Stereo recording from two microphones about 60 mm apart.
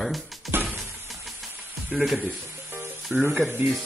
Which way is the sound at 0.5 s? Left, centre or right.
Right.